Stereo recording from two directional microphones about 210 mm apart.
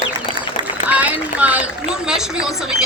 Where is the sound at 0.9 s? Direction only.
5° right (ahead or behind).